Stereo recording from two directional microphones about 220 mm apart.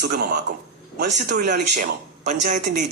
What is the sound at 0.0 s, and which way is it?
Speech, 45° right (ahead or behind).